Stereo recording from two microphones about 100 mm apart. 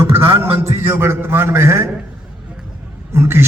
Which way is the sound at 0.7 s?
25° right (ahead or behind).